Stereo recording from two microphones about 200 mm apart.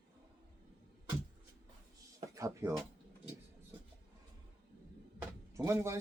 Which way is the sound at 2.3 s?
15° right (ahead or behind).